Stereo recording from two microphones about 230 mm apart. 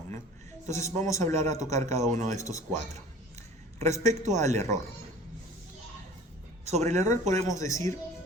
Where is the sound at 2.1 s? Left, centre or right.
Right.